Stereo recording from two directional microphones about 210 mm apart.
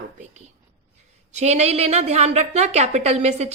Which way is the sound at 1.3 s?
30° right (ahead or behind).